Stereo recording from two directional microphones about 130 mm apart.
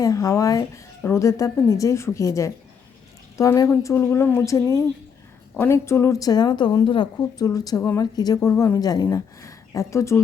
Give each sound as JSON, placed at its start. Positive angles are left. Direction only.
{"t": 0.0, "sound": "speech", "side_deg": 25}